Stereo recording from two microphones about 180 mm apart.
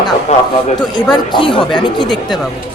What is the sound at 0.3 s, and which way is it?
Speech, 35° left (ahead or behind).